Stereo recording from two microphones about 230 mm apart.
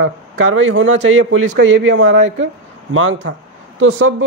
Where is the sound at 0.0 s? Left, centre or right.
Right.